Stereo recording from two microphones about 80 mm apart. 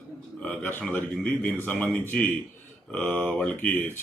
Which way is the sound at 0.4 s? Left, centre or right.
Centre.